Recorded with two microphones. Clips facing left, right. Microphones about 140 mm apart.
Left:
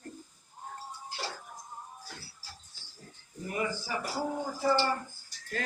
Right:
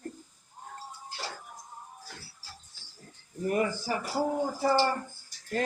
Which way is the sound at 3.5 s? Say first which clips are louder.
Right 5 dB; 50° right (ahead or behind).